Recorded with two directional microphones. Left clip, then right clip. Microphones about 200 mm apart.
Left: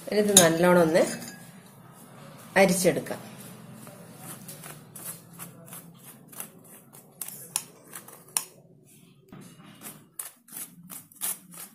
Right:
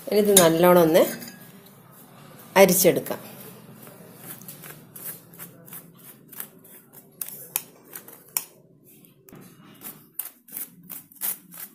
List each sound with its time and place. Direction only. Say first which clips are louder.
0.1 s speech: right 3 dB; 30° right (ahead or behind)
2.5 s speech: right 5 dB; 35° right (ahead or behind)